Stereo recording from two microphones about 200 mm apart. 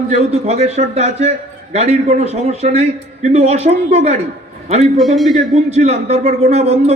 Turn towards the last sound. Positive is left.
turn(degrees=-35)  # may be behind; listen again after turning